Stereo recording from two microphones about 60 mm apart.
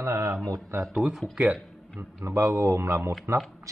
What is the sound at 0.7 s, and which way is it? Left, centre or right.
Speech, right.